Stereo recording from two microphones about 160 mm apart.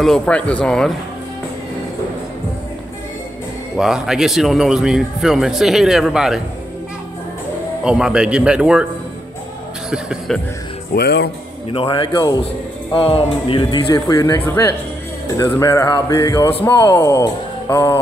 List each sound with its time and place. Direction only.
0.0 s a man's voice: 5° left (ahead or behind)
3.7 s a man's voice: 5° right (ahead or behind)
7.8 s a man's voice: 5° right (ahead or behind)
9.8 s a man's voice: centre (ahead or behind)
11.0 s speech: 90° left
11.7 s a man's voice: 30° left (ahead or behind)